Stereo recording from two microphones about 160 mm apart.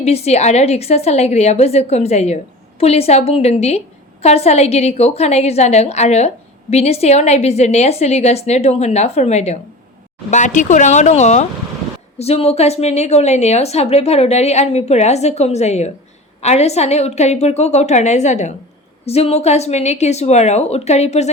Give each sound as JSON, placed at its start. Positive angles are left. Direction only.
{"t": 0.0, "sound": "a woman's voice", "side_deg": 40}